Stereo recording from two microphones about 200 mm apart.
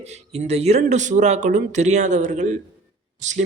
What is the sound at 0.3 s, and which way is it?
Speech, 30° right (ahead or behind).